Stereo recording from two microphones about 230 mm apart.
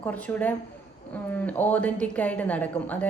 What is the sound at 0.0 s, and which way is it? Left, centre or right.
Speech, centre.